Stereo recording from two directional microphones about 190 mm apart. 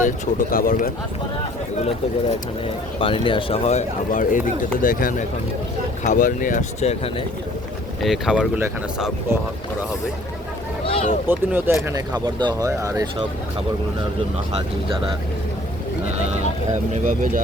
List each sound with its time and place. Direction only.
0.0 s speech: 50° left (ahead or behind)
3.0 s speech: 25° left (ahead or behind)
8.0 s speech: centre (ahead or behind)
10.8 s speech: 30° left (ahead or behind)
11.3 s speech: 10° right (ahead or behind)
16.9 s speech: 40° right (ahead or behind)